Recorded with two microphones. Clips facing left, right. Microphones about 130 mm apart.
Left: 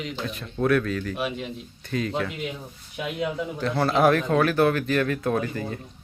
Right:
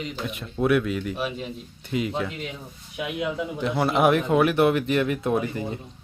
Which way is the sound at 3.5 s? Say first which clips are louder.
Even; 20° right (ahead or behind).